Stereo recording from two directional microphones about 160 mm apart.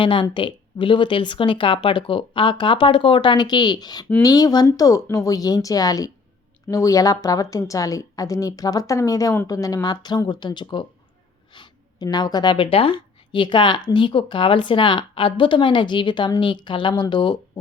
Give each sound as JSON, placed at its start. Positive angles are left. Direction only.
{"t": 0.0, "sound": "speech", "side_deg": 30}
{"t": 11.5, "sound": "a sound", "side_deg": 30}
{"t": 12.0, "sound": "speech", "side_deg": 25}